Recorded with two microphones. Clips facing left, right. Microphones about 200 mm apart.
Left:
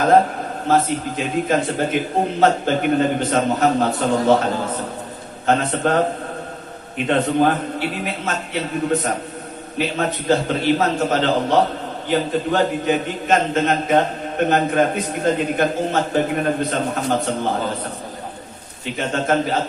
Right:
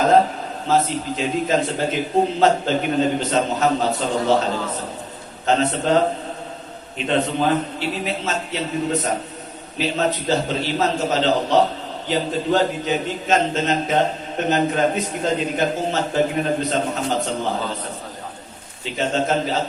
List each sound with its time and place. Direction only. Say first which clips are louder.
0.7 s a man's voice: left 1 dB; 55° left (ahead or behind)
5.5 s a man's voice: even; 55° left (ahead or behind)
7.1 s a man's voice: left 2 dB; 55° left (ahead or behind)
18.9 s a man's voice: even; 55° left (ahead or behind)